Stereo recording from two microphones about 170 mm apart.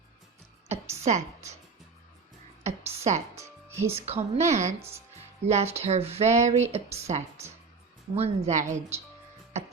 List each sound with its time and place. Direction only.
0.7 s a sound: 40° right (ahead or behind)
2.6 s a sound: 40° right (ahead or behind)
3.3 s music: 15° right (ahead or behind)
3.9 s speech: 35° right (ahead or behind)
4.8 s speech: 15° right (ahead or behind)
5.5 s a woman's voice: 40° right (ahead or behind)